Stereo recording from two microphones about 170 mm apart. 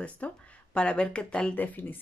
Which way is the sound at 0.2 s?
10° left (ahead or behind).